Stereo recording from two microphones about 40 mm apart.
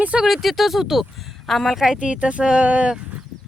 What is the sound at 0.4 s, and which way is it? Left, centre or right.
Speech, centre.